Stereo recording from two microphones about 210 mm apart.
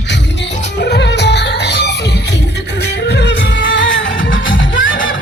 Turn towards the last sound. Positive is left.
turn(degrees=65)  # may be behind; listen again after turning